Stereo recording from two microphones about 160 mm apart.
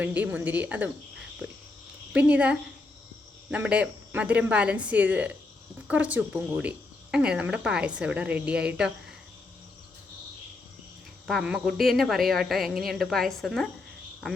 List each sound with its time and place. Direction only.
0.0 s speech: 10° right (ahead or behind)
2.1 s speech: 10° right (ahead or behind)
11.3 s a woman's voice: centre (ahead or behind)